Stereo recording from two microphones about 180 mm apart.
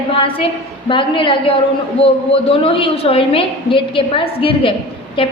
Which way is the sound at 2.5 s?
30° left (ahead or behind).